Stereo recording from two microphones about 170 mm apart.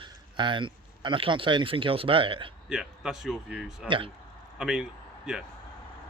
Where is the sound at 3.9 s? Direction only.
30° right (ahead or behind).